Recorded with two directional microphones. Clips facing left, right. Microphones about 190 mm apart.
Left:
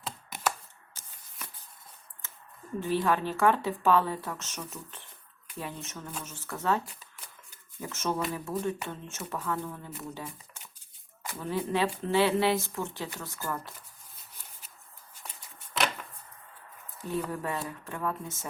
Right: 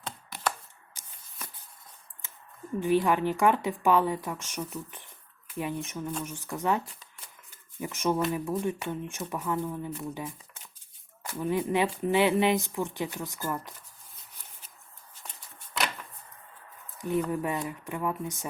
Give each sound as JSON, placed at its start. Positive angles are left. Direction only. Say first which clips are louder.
{"t": 0.9, "sound": "shuffling cards", "louder": "left 1 dB", "side_deg": -15}
{"t": 2.8, "sound": "speech", "louder": "right 3 dB", "side_deg": -15}
{"t": 11.3, "sound": "speech", "louder": "right 3 dB", "side_deg": -15}
{"t": 17.0, "sound": "speech", "louder": "right 4 dB", "side_deg": -15}